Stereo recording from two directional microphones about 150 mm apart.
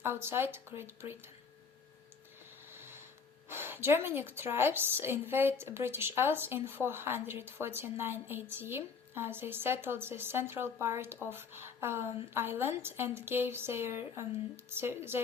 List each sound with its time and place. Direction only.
0.0 s a woman's voice: 15° right (ahead or behind)
2.7 s a sound: 15° right (ahead or behind)
3.5 s a woman's voice: 15° right (ahead or behind)